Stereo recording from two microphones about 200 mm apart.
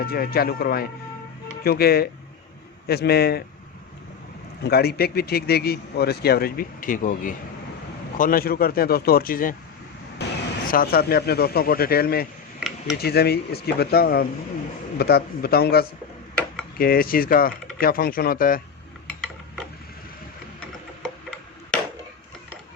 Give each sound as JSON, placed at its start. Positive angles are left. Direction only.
{"t": 0.0, "sound": "a man's voice", "side_deg": 50}
{"t": 4.6, "sound": "a man's voice", "side_deg": 55}
{"t": 10.2, "sound": "vehicle", "side_deg": 55}
{"t": 10.7, "sound": "a man's voice", "side_deg": 45}